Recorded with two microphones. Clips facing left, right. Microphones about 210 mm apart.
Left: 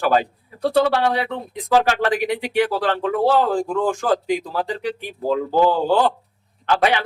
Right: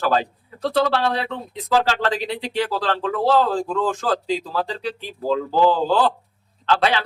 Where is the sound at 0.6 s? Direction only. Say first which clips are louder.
Left 2 dB; 15° left (ahead or behind).